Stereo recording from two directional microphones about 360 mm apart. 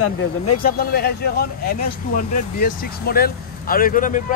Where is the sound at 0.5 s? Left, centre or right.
Left.